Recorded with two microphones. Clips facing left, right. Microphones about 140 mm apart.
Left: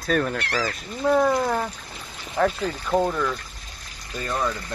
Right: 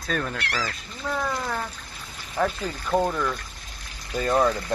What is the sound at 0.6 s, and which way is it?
Speech, 30° left (ahead or behind).